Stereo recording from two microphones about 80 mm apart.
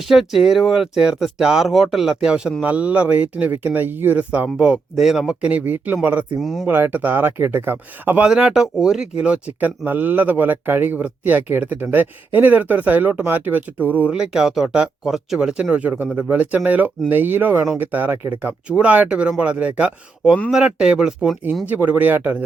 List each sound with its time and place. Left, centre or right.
0.0 s speech: centre
6.4 s speech: centre
6.7 s speech: right
8.2 s speech: centre
14.1 s speech: centre
21.7 s speech: centre